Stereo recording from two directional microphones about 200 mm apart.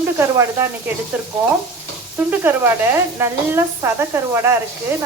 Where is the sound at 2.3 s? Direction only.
10° right (ahead or behind).